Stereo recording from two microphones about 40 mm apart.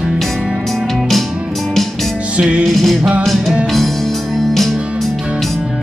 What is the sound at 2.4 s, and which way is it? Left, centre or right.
Music, right.